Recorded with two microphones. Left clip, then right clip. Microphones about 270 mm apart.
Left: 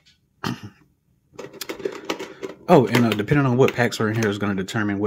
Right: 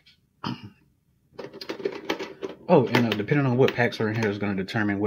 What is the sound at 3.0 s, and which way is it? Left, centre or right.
Speech, centre.